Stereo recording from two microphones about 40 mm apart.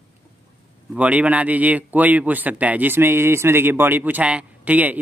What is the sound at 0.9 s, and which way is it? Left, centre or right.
Speech, right.